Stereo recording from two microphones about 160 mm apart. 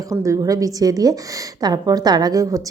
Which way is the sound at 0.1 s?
20° right (ahead or behind).